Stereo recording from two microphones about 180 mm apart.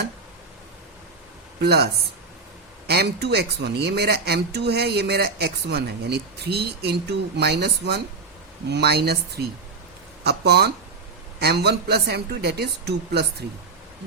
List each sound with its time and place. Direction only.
1.6 s speech: 65° right (ahead or behind)